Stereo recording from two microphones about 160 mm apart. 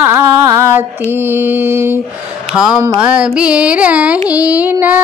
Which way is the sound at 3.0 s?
5° right (ahead or behind).